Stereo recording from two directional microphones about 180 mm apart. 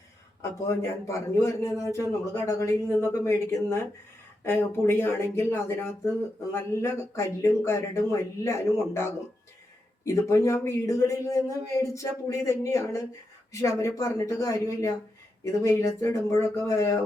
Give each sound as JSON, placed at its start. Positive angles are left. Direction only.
{"t": 0.8, "sound": "a man's voice", "side_deg": 15}